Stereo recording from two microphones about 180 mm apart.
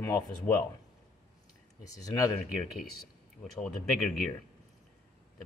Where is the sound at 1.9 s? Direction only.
20° left (ahead or behind).